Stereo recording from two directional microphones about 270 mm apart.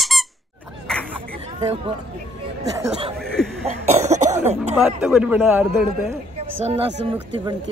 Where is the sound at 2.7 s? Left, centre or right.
Centre.